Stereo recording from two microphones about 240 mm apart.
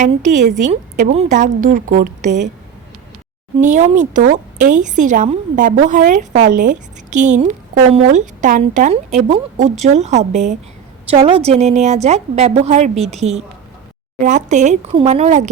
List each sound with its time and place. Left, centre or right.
0.0 s a woman's voice: right
3.6 s a woman's voice: right